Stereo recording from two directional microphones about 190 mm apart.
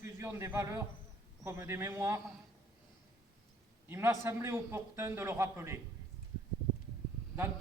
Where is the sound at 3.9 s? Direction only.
15° right (ahead or behind).